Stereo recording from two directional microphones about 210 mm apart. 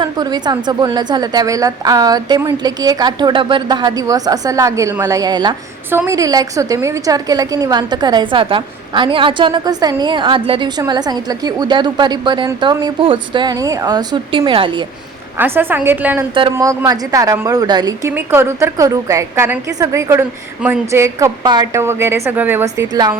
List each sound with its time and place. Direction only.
0.0 s a woman's voice: 20° right (ahead or behind)
15.4 s a woman's voice: 10° right (ahead or behind)
16.3 s a woman's voice: 20° right (ahead or behind)